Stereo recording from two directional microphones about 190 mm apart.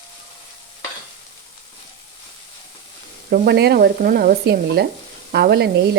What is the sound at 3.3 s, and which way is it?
Speech, 55° right (ahead or behind).